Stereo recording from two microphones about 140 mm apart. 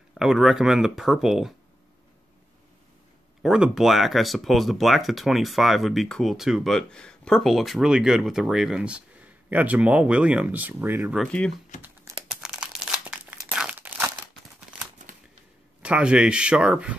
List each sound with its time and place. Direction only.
0.2 s speech: 5° right (ahead or behind)
3.4 s speech: 5° right (ahead or behind)
11.1 s speech: 5° left (ahead or behind)
11.8 s crumpling: 20° right (ahead or behind)
12.3 s crumpling: 5° right (ahead or behind)
15.8 s speech: 10° right (ahead or behind)